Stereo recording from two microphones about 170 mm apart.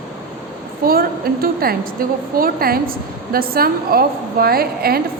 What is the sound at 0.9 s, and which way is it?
A woman's voice, 60° right (ahead or behind).